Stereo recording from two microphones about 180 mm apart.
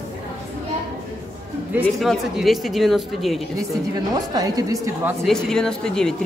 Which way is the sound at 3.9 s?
20° right (ahead or behind).